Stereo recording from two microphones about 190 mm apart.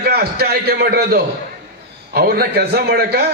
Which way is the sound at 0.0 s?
55° right (ahead or behind).